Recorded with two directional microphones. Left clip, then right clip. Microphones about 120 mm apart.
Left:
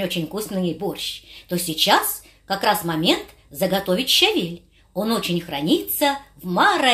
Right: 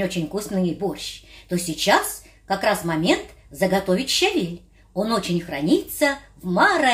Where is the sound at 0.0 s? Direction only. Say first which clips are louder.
Even; 15° left (ahead or behind).